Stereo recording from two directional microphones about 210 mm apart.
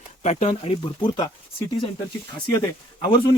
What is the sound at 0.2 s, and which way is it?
Speech, 35° left (ahead or behind).